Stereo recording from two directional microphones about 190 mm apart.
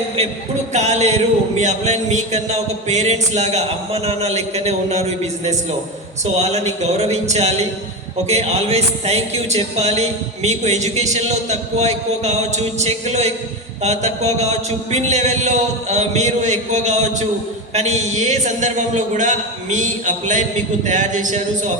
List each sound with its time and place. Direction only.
0.7 s speech: 35° right (ahead or behind)